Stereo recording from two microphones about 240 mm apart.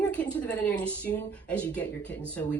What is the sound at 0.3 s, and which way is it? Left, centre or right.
Speech, centre.